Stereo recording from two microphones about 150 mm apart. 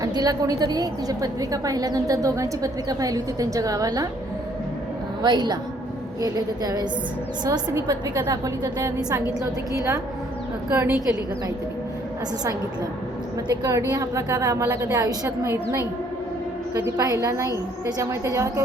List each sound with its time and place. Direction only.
0.0 s a woman's voice: 25° right (ahead or behind)
5.2 s a woman's voice: 30° right (ahead or behind)
13.5 s a woman's voice: 25° right (ahead or behind)